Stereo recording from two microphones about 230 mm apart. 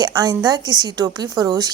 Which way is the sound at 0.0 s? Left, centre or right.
Centre.